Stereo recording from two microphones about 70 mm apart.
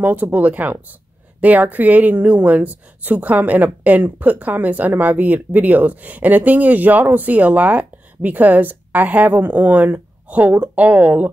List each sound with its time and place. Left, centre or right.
0.0 s speech: right